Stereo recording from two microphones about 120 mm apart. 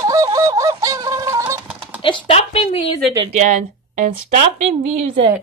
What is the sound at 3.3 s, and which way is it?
Speech, 90° right.